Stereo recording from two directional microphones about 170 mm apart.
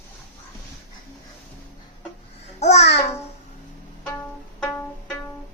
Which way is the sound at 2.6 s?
40° left (ahead or behind).